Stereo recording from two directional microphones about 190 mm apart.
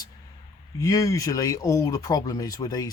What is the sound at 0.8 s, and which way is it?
Speech, 20° left (ahead or behind).